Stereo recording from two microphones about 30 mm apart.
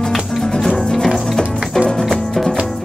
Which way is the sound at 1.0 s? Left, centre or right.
Centre.